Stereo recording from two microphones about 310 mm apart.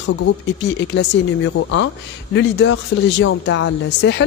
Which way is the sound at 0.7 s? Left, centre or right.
Left.